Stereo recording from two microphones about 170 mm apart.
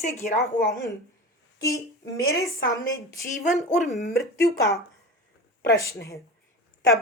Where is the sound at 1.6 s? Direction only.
20° left (ahead or behind).